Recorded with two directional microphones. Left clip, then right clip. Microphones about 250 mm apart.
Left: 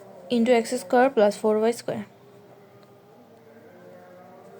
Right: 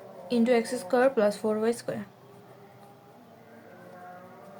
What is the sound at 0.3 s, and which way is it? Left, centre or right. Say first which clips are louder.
Speech: left 4 dB; left.